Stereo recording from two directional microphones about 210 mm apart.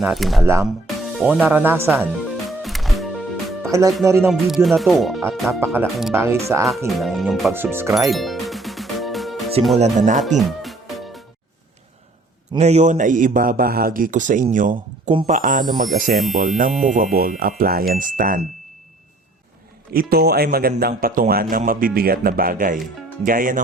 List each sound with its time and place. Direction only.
0.0 s music: centre (ahead or behind)
0.6 s speech: centre (ahead or behind)
2.0 s music: centre (ahead or behind)
3.7 s speech: 15° right (ahead or behind)
4.3 s music: centre (ahead or behind)
5.5 s speech: 10° right (ahead or behind)
6.8 s music: centre (ahead or behind)
7.6 s speech: 10° right (ahead or behind)
7.9 s music: centre (ahead or behind)
9.7 s a man's voice: 35° right (ahead or behind)
10.3 s music: centre (ahead or behind)
12.5 s a man's voice: 30° right (ahead or behind)
19.9 s a man's voice: 45° right (ahead or behind)